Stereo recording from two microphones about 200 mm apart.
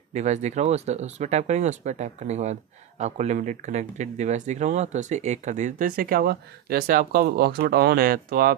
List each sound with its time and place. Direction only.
0.1 s speech: 35° right (ahead or behind)